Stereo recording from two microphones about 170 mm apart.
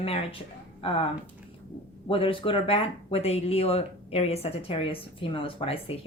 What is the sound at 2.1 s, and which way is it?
Speech, 30° left (ahead or behind).